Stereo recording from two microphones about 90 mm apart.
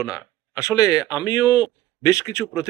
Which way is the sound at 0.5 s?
40° left (ahead or behind).